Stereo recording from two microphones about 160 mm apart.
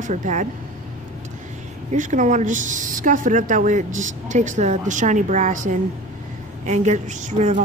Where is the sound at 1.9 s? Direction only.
50° right (ahead or behind).